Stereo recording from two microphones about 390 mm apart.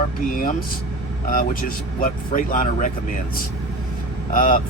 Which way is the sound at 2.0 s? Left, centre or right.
Left.